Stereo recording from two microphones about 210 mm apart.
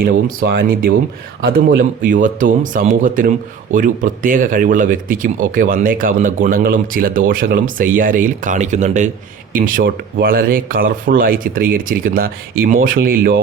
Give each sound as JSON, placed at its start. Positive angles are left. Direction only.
{"t": 0.0, "sound": "speech", "side_deg": -45}